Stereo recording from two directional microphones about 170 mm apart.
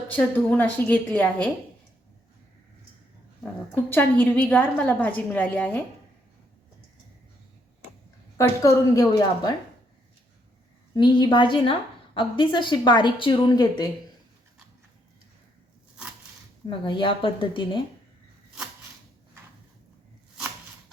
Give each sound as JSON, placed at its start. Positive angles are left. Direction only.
{"t": 0.1, "sound": "a woman's voice", "side_deg": 10}
{"t": 3.4, "sound": "a woman's voice", "side_deg": 10}
{"t": 8.4, "sound": "a woman's voice", "side_deg": 20}
{"t": 10.9, "sound": "a woman's voice", "side_deg": 25}
{"t": 16.6, "sound": "a woman's voice", "side_deg": 30}